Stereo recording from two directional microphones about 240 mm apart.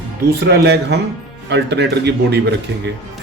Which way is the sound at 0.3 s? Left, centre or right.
Right.